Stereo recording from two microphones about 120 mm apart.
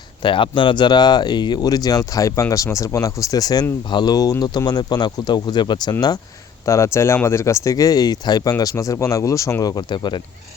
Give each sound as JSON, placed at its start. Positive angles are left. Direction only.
{"t": 0.2, "sound": "speech", "side_deg": 45}